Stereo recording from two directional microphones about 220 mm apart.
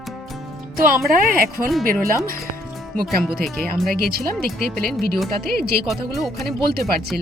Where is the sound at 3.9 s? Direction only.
45° right (ahead or behind).